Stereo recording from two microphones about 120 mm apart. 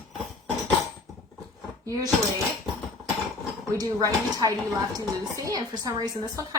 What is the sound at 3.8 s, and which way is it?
A woman's voice, 30° right (ahead or behind).